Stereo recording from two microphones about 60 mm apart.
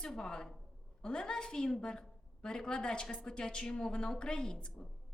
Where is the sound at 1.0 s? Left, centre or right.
Centre.